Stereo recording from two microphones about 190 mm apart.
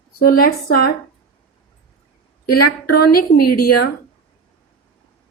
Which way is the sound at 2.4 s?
55° left (ahead or behind).